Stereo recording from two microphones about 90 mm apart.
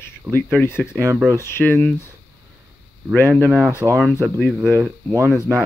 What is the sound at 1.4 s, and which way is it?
Speech, 25° left (ahead or behind).